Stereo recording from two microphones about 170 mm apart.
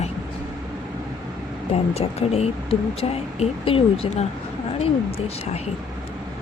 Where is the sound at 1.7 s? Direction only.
35° left (ahead or behind).